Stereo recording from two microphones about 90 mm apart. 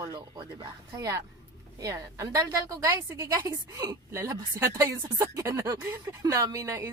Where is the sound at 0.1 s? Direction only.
45° right (ahead or behind).